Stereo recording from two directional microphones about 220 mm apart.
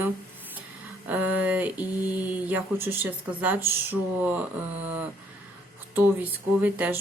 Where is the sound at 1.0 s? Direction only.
5° right (ahead or behind).